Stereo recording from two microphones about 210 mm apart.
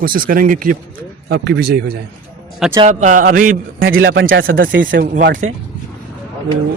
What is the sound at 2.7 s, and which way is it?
Speech, 30° right (ahead or behind).